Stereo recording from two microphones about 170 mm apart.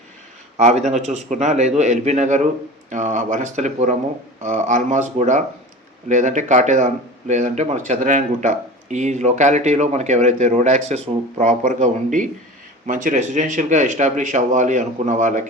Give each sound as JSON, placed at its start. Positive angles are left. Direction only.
{"t": 0.6, "sound": "speech", "side_deg": -40}